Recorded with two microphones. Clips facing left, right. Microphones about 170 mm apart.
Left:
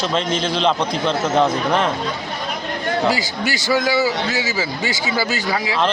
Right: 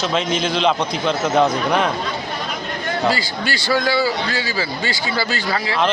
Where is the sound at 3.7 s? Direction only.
15° left (ahead or behind).